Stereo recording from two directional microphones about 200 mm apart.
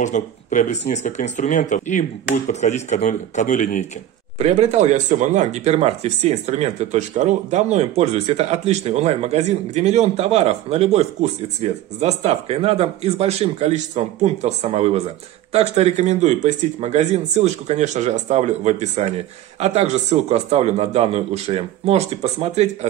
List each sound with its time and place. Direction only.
0.0 s speech: 40° left (ahead or behind)
4.4 s speech: 35° right (ahead or behind)